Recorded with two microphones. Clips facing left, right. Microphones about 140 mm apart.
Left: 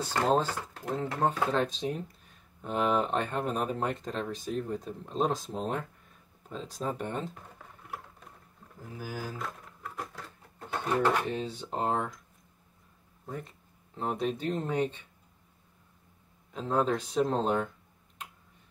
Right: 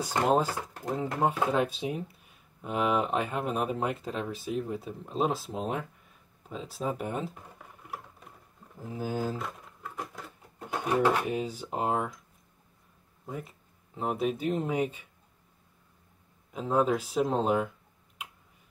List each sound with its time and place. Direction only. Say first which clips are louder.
0.0 s speech: right 1 dB; 10° right (ahead or behind)
6.5 s computer keyboard: right 1 dB; 5° right (ahead or behind)
8.7 s speech: right 6 dB; 20° right (ahead or behind)
9.4 s a sound: right 1 dB; centre (ahead or behind)
10.2 s speech: right 2 dB; 10° right (ahead or behind)
13.2 s speech: right 1 dB; 5° right (ahead or behind)
16.5 s speech: right 2 dB; 5° right (ahead or behind)